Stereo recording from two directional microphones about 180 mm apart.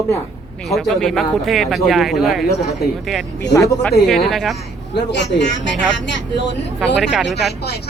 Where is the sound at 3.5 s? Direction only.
15° left (ahead or behind).